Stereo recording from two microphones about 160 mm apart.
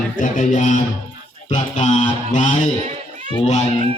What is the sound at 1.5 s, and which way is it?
Music, 45° left (ahead or behind).